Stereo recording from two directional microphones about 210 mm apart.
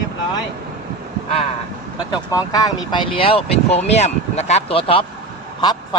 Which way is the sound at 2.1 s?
20° left (ahead or behind).